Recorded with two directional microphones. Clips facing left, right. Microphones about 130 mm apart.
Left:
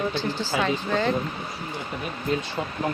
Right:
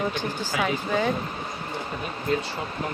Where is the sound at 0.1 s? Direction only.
15° right (ahead or behind).